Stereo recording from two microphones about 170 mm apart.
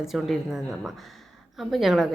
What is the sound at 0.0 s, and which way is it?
A woman's voice, centre (ahead or behind).